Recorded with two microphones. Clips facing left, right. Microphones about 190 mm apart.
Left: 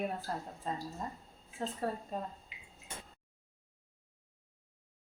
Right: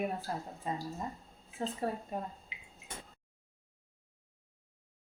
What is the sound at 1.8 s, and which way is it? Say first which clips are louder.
Speech: right 1 dB; 15° right (ahead or behind).